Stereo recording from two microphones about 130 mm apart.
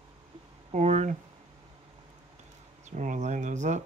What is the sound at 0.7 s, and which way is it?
Speech, 65° right (ahead or behind).